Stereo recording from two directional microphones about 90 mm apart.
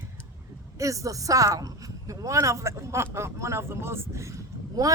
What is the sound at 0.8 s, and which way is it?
A woman's voice, 35° right (ahead or behind).